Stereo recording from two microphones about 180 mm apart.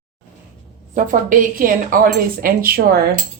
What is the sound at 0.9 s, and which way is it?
A woman's voice, 50° right (ahead or behind).